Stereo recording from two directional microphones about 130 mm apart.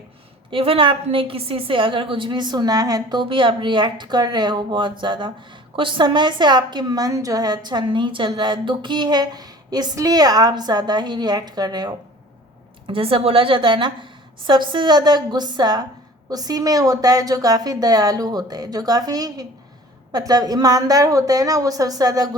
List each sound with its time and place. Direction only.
0.5 s a woman's voice: 45° right (ahead or behind)
12.9 s a woman's voice: 45° right (ahead or behind); by 22.4 s 30° right (ahead or behind)